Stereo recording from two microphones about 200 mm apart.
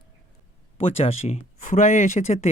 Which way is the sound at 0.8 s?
30° left (ahead or behind).